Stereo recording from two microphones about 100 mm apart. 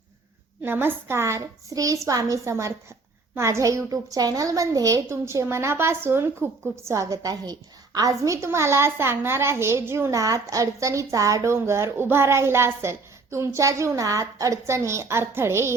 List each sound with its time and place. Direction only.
0.6 s a woman's voice: 20° right (ahead or behind)